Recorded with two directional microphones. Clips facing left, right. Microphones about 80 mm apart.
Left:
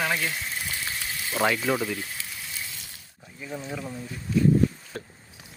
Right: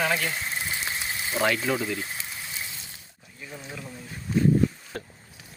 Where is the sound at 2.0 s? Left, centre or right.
Right.